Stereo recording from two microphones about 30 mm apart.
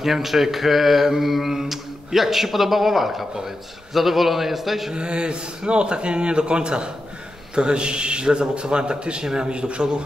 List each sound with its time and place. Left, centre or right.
0.0 s mantra: centre
4.9 s a man's voice: right